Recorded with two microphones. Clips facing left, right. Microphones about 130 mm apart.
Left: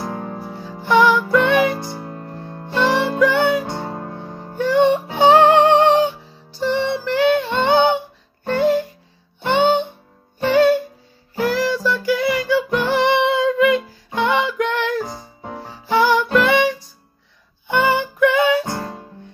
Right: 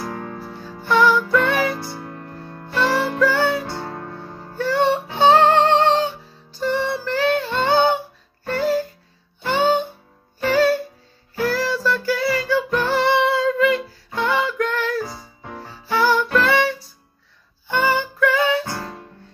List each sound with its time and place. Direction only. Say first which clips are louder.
0.0 s music: left 2 dB; 20° left (ahead or behind)